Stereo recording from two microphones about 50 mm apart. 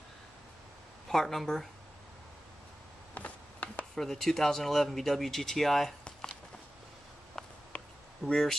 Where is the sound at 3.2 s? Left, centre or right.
Left.